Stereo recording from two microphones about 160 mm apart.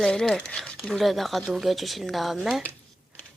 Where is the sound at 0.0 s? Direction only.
5° left (ahead or behind).